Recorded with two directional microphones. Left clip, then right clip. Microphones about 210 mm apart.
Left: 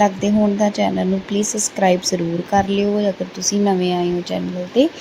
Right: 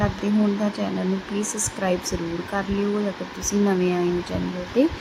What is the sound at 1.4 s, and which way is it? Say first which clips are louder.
Speech: left 10 dB; 10° left (ahead or behind).